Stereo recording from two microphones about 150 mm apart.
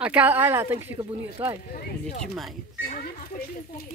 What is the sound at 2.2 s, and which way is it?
Speech, centre (ahead or behind).